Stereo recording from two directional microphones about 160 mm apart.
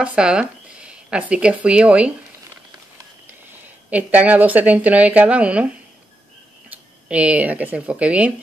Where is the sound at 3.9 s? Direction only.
10° right (ahead or behind).